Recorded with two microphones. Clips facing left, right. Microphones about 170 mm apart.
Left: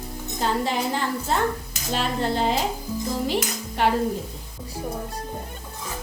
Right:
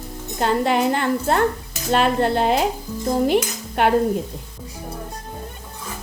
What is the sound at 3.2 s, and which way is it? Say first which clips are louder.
Stir: right 6 dB; 55° right (ahead or behind).